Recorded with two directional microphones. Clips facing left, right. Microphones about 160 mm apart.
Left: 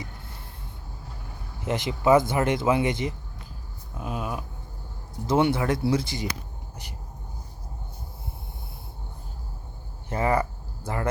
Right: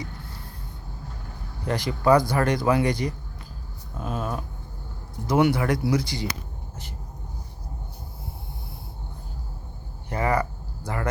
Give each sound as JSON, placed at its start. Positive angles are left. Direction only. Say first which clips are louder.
{"t": 1.6, "sound": "speech", "louder": "right 1 dB", "side_deg": 20}
{"t": 5.2, "sound": "speech", "louder": "right 1 dB", "side_deg": 25}
{"t": 10.1, "sound": "cricket", "louder": "even", "side_deg": 25}
{"t": 10.8, "sound": "speech", "louder": "even", "side_deg": 25}